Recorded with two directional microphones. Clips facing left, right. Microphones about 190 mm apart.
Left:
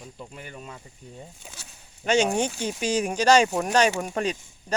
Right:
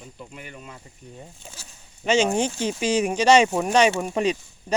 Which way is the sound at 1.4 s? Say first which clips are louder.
Right 1 dB; centre (ahead or behind).